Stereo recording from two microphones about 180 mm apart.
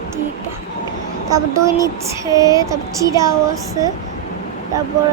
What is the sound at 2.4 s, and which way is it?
Child singing, 20° right (ahead or behind).